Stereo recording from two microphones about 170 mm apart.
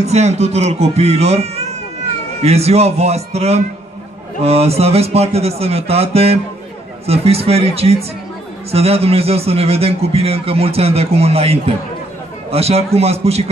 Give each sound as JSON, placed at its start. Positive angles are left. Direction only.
{"t": 0.0, "sound": "a man's voice", "side_deg": -40}